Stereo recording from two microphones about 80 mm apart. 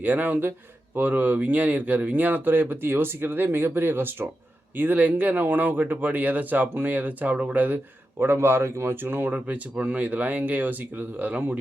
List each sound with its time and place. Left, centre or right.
0.0 s speech: right